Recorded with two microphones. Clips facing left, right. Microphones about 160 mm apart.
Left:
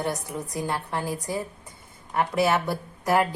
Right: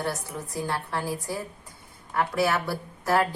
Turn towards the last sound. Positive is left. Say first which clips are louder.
# left 1 dB
turn(degrees=15)  # may be behind; listen again after turning